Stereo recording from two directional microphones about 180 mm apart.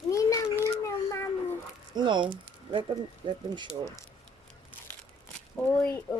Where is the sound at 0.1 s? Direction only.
15° left (ahead or behind).